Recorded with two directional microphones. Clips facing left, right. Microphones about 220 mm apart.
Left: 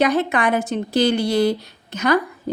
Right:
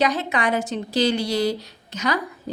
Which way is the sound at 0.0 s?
55° left (ahead or behind).